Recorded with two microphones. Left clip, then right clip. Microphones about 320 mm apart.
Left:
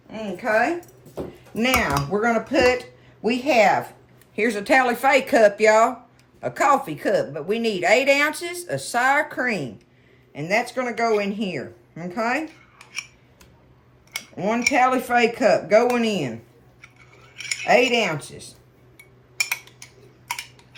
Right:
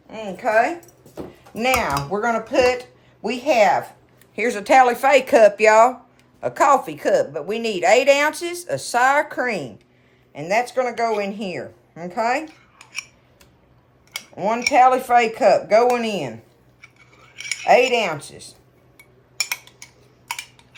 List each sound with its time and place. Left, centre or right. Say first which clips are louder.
0.1 s speech: right 2 dB; right
1.5 s a woman's voice: right 1 dB; centre
14.1 s a woman's voice: right 2 dB; centre
17.6 s a woman's voice: right 2 dB; centre
18.9 s a sound: left 1 dB; centre